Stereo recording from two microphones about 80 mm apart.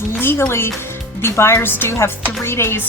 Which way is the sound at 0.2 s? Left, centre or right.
Left.